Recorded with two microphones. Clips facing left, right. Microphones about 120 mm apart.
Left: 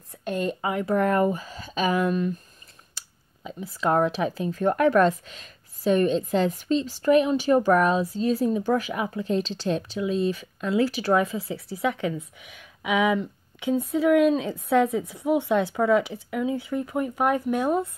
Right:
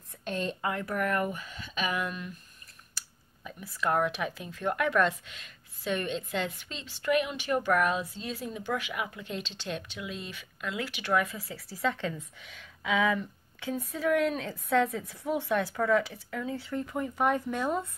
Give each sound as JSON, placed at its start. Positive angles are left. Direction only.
{"t": 0.3, "sound": "speech", "side_deg": 10}
{"t": 0.8, "sound": "speech", "side_deg": 30}
{"t": 3.4, "sound": "speech", "side_deg": 25}